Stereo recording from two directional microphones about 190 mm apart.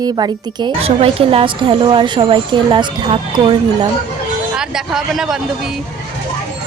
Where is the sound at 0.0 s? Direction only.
20° right (ahead or behind).